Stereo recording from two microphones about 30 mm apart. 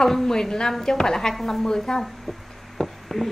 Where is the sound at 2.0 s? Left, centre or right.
Centre.